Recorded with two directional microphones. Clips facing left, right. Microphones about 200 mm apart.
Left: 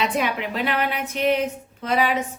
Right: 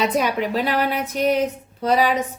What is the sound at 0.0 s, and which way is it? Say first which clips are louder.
A woman's voice: right 3 dB; 40° right (ahead or behind).